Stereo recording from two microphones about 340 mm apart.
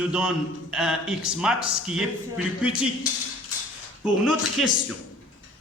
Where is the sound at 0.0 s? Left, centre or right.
Centre.